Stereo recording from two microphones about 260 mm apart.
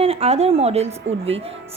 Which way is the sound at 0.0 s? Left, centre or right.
Right.